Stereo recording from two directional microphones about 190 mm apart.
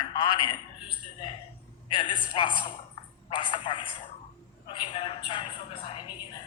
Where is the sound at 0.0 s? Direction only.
25° left (ahead or behind).